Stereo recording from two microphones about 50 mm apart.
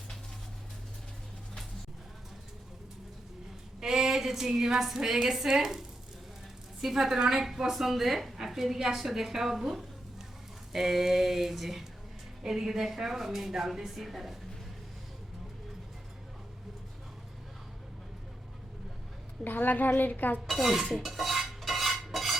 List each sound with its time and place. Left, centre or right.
3.8 s a woman's voice: centre
6.8 s a woman's voice: centre
19.5 s a woman's voice: left
20.5 s cutlery: centre